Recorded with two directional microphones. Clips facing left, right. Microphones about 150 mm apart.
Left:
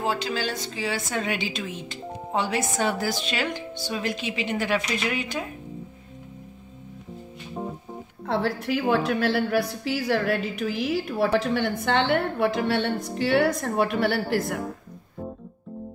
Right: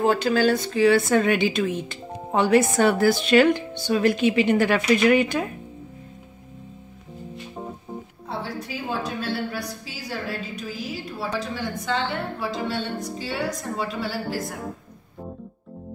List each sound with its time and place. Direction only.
0.0 s a woman's voice: 55° right (ahead or behind)
8.3 s a woman's voice: 70° left (ahead or behind)